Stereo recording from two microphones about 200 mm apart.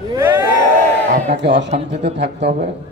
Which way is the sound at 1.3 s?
60° right (ahead or behind).